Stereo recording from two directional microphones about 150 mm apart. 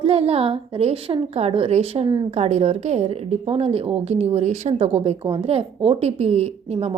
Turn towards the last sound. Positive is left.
turn(degrees=-45)  # may be behind; listen again after turning